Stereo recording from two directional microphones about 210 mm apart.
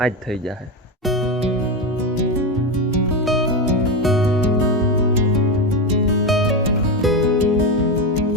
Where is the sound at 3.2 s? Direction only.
Centre (ahead or behind).